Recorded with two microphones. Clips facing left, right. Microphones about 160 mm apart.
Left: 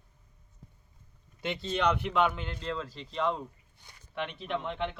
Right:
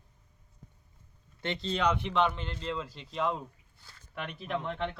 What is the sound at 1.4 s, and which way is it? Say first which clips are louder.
Speech: left 1 dB; 5° left (ahead or behind).